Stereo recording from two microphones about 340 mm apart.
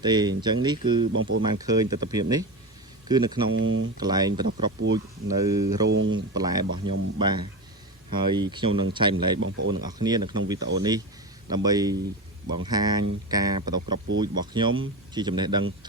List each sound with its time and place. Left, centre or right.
0.0 s speech: centre
1.1 s speech: right
1.4 s speech: centre
3.5 s speech: right
3.9 s speech: centre
4.4 s speech: right
5.9 s speech: right
6.3 s speech: centre
9.4 s speech: right
9.8 s speech: centre